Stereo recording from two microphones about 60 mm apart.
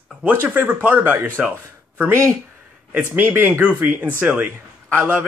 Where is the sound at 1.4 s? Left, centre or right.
Centre.